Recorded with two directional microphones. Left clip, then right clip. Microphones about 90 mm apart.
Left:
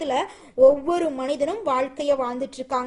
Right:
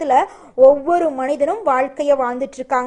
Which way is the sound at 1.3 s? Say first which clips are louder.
Right 6 dB; 15° left (ahead or behind).